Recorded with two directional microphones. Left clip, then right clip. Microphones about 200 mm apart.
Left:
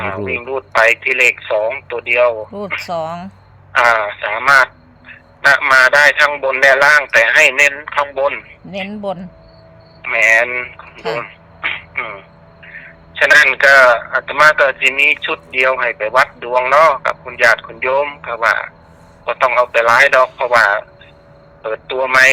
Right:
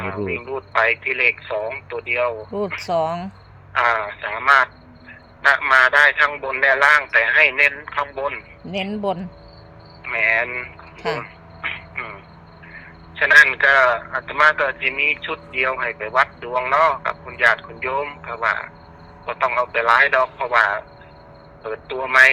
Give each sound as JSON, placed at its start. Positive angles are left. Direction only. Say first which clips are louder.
{"t": 0.0, "sound": "a man's voice", "louder": "left 5 dB", "side_deg": 35}
{"t": 2.8, "sound": "a man's voice", "louder": "even", "side_deg": 5}
{"t": 3.7, "sound": "a man's voice", "louder": "left 7 dB", "side_deg": 30}
{"t": 8.6, "sound": "a man's voice", "louder": "right 1 dB", "side_deg": 0}
{"t": 10.0, "sound": "speech", "louder": "left 7 dB", "side_deg": 30}
{"t": 10.9, "sound": "speech", "louder": "left 3 dB", "side_deg": 5}
{"t": 11.2, "sound": "a sound", "louder": "left 7 dB", "side_deg": 30}
{"t": 12.6, "sound": "a man's voice", "louder": "left 6 dB", "side_deg": 30}